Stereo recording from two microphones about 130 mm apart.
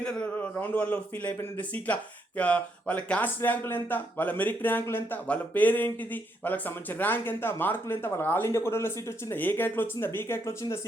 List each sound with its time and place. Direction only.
0.0 s speech: 10° left (ahead or behind)